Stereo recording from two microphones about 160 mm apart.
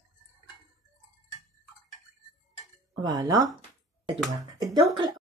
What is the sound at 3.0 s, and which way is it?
Speech, 25° right (ahead or behind).